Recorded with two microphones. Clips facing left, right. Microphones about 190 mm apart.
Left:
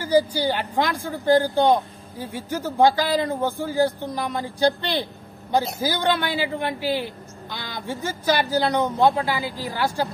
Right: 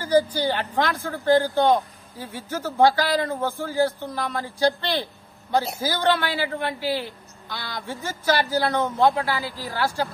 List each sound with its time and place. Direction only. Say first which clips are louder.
0.0 s a woman's voice: left 1 dB; 10° left (ahead or behind)